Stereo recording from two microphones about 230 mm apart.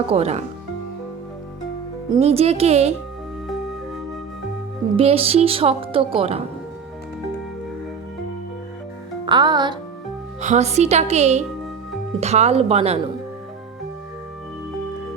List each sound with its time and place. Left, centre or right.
0.1 s speech: right
2.0 s speech: right
4.9 s speech: right
9.2 s speech: centre
10.4 s speech: right